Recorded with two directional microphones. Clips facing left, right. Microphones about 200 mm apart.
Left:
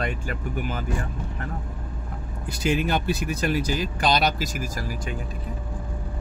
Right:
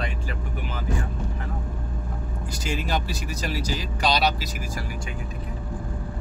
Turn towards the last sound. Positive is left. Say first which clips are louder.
# left 3 dB
turn(degrees=45)  # may be behind; listen again after turning